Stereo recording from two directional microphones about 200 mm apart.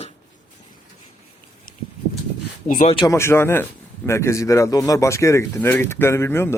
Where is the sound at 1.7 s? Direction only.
45° left (ahead or behind).